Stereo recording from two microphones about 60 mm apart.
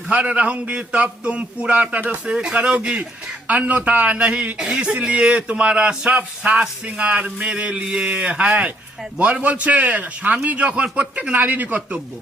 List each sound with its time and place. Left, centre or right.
0.1 s a man's voice: right
4.5 s a man's voice: centre
4.8 s a man's voice: right
6.1 s a man's voice: right